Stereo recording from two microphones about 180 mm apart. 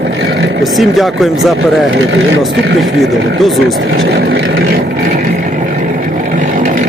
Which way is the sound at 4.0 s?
65° right (ahead or behind).